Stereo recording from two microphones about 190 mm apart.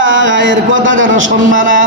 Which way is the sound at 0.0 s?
80° right.